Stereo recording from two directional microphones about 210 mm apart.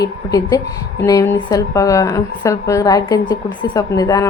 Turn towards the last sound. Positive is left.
turn(degrees=15)  # may be behind; listen again after turning